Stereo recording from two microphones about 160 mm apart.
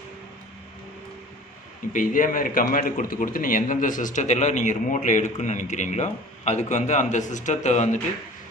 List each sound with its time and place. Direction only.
1.9 s a man's voice: 55° left (ahead or behind)